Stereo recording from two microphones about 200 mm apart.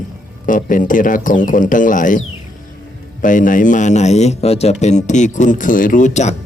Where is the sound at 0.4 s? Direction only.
40° left (ahead or behind).